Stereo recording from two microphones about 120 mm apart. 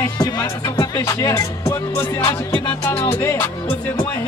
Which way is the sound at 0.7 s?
30° left (ahead or behind).